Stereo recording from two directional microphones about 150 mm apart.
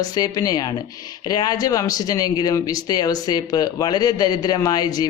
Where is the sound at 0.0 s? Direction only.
25° left (ahead or behind).